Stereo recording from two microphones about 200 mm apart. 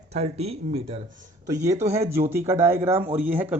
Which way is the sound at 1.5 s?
15° right (ahead or behind).